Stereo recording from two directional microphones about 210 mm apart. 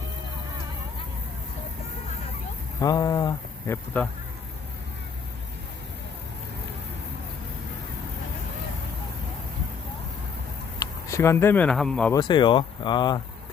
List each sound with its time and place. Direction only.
2.8 s speech: 15° left (ahead or behind)
10.8 s speech: 15° left (ahead or behind)
12.1 s speech: 20° left (ahead or behind)